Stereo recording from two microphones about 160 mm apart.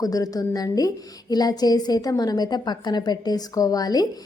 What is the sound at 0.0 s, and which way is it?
A woman's voice, 20° left (ahead or behind).